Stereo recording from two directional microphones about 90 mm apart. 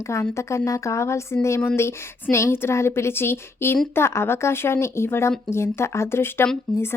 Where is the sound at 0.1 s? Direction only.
30° left (ahead or behind).